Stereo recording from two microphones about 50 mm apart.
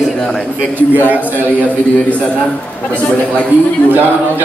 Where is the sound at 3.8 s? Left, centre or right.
Right.